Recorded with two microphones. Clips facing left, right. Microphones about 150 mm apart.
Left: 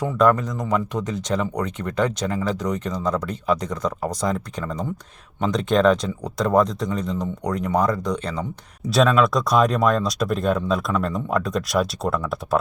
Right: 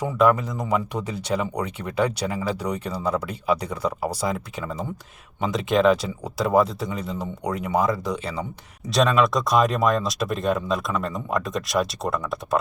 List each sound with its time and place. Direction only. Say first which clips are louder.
0.0 s speech: left 1 dB; 10° right (ahead or behind)